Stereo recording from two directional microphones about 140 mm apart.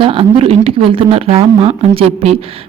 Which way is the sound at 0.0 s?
40° right (ahead or behind).